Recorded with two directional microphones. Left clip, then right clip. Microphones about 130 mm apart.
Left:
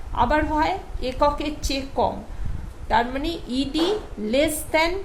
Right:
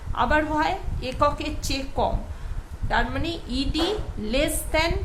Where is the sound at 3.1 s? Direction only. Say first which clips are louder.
Left 2 dB; 25° left (ahead or behind).